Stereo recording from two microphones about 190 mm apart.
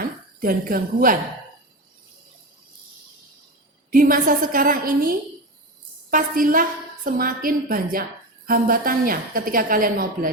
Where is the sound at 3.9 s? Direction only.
45° right (ahead or behind).